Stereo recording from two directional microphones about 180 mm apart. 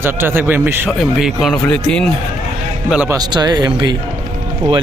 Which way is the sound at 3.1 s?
25° right (ahead or behind).